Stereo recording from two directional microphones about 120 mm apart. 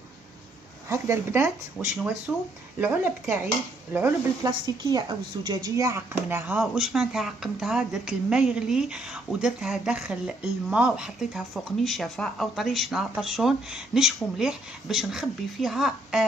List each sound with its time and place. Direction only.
0.8 s speech: 20° right (ahead or behind)
4.8 s speech: 35° right (ahead or behind); by 6.6 s 15° right (ahead or behind)
6.6 s speech: centre (ahead or behind)